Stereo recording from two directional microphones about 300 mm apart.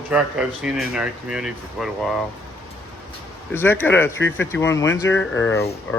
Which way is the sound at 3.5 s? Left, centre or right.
Centre.